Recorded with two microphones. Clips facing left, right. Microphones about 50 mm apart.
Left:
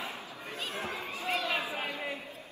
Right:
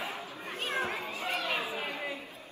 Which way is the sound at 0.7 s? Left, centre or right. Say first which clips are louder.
Right 5 dB; right.